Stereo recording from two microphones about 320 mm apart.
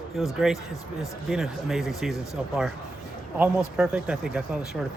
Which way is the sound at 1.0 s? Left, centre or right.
Centre.